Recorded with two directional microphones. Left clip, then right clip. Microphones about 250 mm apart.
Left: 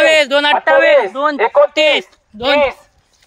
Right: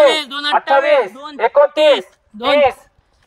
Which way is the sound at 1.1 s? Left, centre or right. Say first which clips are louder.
Left 16 dB; left.